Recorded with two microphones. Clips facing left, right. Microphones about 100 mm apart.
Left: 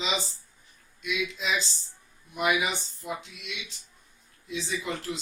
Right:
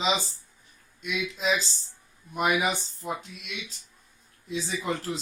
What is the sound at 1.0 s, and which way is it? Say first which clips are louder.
Speech: right 2 dB; 40° right (ahead or behind).